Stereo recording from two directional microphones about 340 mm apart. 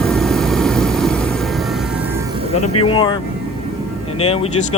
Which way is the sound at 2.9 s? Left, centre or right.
Centre.